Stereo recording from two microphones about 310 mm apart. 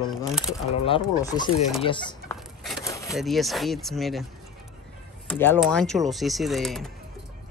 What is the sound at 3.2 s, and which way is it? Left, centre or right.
Speech, centre.